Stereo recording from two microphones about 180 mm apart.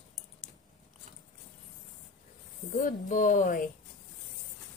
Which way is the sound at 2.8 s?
45° left (ahead or behind).